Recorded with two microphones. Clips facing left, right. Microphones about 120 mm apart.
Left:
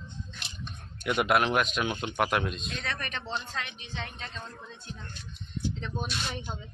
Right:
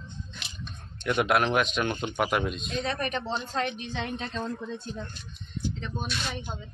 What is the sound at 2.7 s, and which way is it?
A woman's voice, 35° right (ahead or behind).